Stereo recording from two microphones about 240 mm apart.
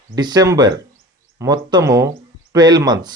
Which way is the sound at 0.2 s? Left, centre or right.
Centre.